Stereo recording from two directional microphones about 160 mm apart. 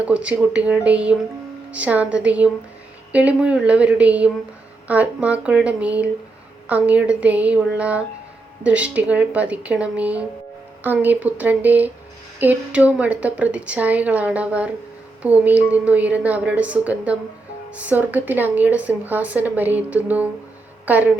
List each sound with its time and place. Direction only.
0.0 s a woman's voice: 5° right (ahead or behind)